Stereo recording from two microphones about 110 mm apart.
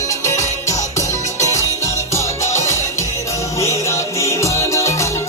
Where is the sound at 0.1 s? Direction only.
30° left (ahead or behind).